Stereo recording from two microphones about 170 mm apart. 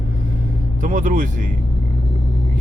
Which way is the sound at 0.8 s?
50° right (ahead or behind).